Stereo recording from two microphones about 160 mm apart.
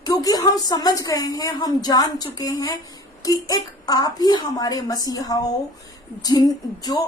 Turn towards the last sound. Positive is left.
turn(degrees=25)  # may be behind; listen again after turning